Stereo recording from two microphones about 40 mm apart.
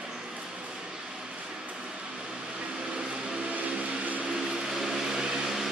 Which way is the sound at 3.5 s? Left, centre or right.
Right.